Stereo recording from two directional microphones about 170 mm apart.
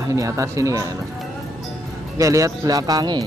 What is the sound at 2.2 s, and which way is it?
Speech, 20° right (ahead or behind).